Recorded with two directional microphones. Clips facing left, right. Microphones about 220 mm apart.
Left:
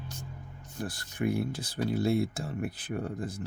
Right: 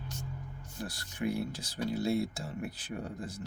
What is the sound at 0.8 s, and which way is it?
Speech, 55° left (ahead or behind).